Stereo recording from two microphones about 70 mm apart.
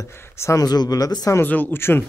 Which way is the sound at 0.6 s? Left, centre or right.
Left.